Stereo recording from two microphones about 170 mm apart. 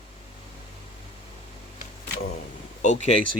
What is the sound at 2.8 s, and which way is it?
Speech, 45° left (ahead or behind).